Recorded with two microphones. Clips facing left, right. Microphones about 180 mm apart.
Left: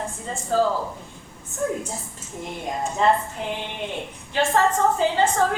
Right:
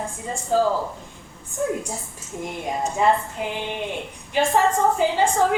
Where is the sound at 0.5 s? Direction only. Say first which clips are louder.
Right 1 dB; 15° right (ahead or behind).